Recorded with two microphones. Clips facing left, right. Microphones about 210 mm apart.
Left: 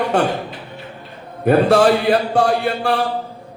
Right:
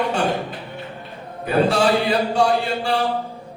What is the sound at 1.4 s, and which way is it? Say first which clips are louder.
A man's voice: left 5 dB; 55° left (ahead or behind).